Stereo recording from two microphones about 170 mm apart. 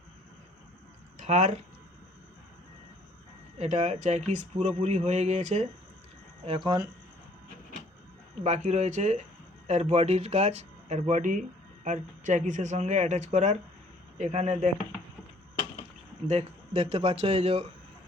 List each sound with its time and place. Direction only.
1.2 s speech: 45° right (ahead or behind)
3.6 s speech: 45° right (ahead or behind)
8.4 s speech: 45° right (ahead or behind)
16.3 s speech: 35° right (ahead or behind)